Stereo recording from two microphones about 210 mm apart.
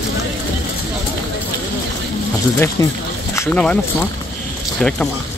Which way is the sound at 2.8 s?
15° left (ahead or behind).